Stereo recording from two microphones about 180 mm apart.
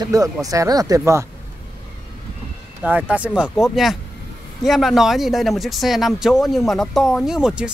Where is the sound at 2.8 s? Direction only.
5° right (ahead or behind).